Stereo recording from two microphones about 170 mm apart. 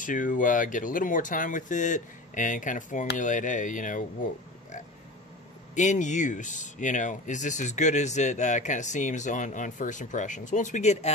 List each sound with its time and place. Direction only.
0.0 s speech: 50° left (ahead or behind)
5.8 s speech: 45° left (ahead or behind)